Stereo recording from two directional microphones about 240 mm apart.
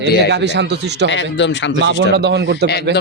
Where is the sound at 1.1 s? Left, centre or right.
Left.